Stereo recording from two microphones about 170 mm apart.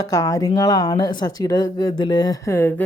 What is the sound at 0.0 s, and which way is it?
Speech, 20° left (ahead or behind).